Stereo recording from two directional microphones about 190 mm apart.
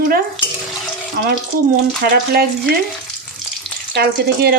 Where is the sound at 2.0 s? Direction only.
55° right (ahead or behind).